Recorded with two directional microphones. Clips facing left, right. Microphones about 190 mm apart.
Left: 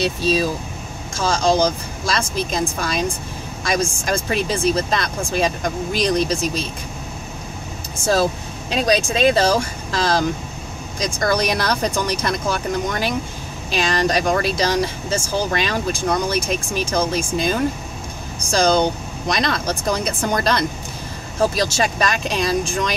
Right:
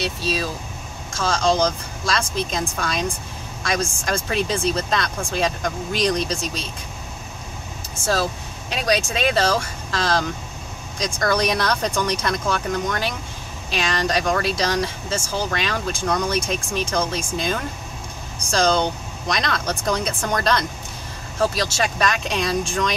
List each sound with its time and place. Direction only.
0.2 s speech: 15° left (ahead or behind)
9.3 s speech: 15° left (ahead or behind)